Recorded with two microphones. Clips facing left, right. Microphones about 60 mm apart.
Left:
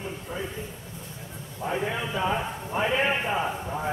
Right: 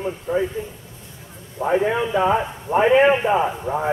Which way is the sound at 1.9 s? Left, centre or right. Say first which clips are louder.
Right 9 dB; right.